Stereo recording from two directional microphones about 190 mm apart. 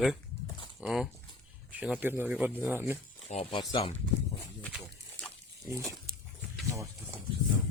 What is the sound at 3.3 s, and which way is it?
Speech, 30° left (ahead or behind).